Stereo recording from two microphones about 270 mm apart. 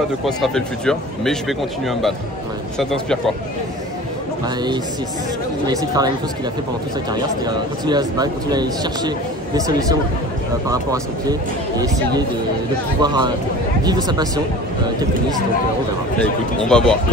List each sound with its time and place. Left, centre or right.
0.2 s speech: centre
5.7 s speech: centre
13.0 s speech: centre
16.2 s speech: centre